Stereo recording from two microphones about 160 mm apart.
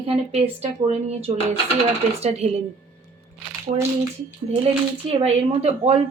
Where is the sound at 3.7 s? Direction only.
45° right (ahead or behind).